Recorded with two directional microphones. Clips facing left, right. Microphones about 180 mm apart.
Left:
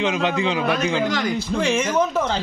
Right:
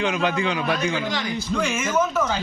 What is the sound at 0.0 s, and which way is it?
A man's voice, 20° left (ahead or behind).